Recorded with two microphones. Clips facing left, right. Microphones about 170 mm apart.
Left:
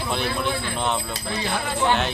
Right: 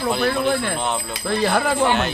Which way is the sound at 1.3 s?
65° right (ahead or behind).